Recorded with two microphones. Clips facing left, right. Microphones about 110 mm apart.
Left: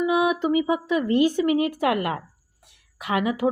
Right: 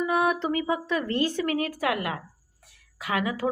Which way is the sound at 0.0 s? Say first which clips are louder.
Left 3 dB; 10° left (ahead or behind).